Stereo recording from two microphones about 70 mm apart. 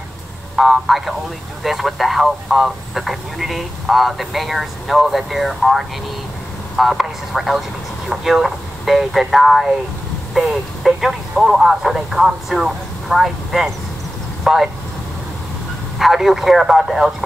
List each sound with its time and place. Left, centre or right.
0.6 s speech: centre
16.0 s speech: centre